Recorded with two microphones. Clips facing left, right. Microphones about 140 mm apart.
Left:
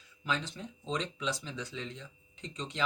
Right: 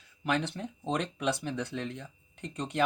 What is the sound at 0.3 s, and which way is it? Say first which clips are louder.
Speech: right 5 dB; 65° right (ahead or behind).